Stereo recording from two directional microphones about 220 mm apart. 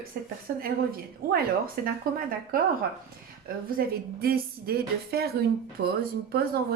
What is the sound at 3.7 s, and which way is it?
A woman's voice, 45° right (ahead or behind).